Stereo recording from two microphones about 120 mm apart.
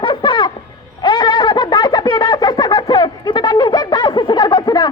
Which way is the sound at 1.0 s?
35° left (ahead or behind).